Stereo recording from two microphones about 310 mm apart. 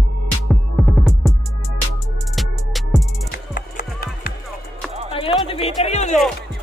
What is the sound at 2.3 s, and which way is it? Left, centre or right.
Music, centre.